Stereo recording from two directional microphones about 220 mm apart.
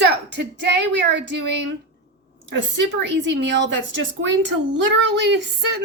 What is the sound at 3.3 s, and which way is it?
A woman's voice, 55° right (ahead or behind).